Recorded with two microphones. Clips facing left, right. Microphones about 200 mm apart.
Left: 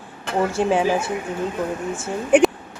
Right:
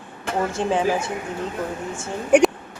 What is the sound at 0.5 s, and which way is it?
A woman's voice, 10° left (ahead or behind).